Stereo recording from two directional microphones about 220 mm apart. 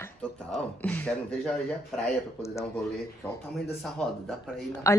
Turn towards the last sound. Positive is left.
turn(degrees=15)  # may be behind; listen again after turning